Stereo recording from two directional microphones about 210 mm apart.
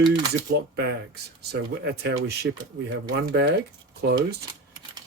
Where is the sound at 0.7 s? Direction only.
50° right (ahead or behind).